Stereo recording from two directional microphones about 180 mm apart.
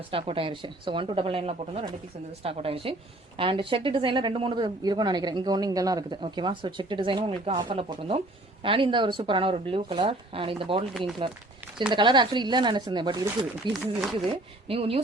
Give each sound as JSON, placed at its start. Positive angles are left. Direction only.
{"t": 0.1, "sound": "speech", "side_deg": -30}